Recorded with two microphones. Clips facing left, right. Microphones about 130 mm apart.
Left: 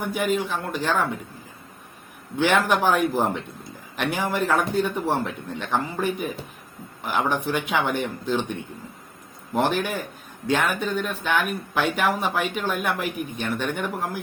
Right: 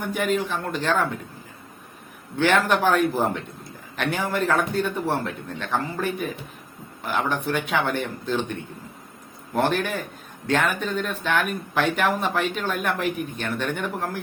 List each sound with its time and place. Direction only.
0.0 s speech: 10° left (ahead or behind)
2.4 s speech: 10° left (ahead or behind)